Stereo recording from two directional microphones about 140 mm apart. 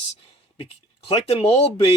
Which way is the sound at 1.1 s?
40° left (ahead or behind).